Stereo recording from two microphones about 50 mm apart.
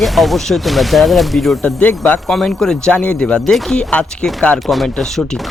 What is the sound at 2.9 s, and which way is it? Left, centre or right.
Speech, left.